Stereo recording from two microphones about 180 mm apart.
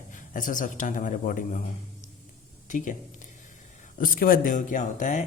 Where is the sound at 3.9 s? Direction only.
50° left (ahead or behind).